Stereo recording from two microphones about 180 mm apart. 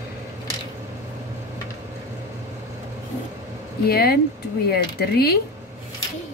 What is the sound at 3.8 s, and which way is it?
Speech, 60° left (ahead or behind).